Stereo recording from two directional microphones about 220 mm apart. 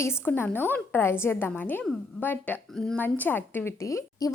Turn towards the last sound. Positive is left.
turn(degrees=15)  # may be behind; listen again after turning